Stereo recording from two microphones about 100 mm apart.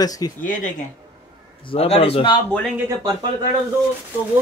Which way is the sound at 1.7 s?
85° left.